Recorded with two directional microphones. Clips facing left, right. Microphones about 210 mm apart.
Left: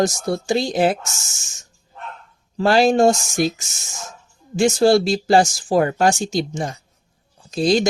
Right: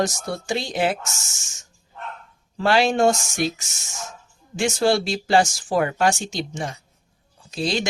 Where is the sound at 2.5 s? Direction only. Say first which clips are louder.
Left 4 dB; 40° left (ahead or behind).